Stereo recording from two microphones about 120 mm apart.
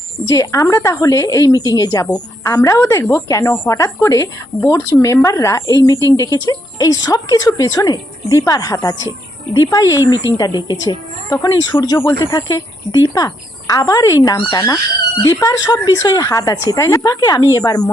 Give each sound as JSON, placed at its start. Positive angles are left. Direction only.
{"t": 0.3, "sound": "a woman's voice", "side_deg": 25}